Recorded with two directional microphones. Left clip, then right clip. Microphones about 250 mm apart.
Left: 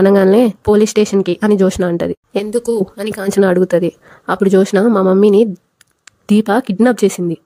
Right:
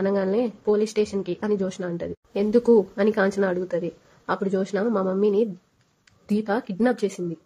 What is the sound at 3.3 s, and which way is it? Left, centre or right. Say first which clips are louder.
A woman's voice: left 13 dB; left.